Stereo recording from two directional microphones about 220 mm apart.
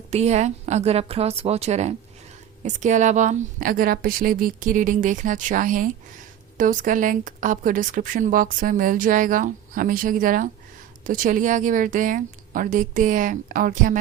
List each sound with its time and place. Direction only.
0.1 s a woman's voice: 30° right (ahead or behind)